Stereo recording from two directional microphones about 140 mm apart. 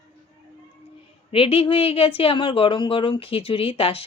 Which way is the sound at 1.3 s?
45° left (ahead or behind).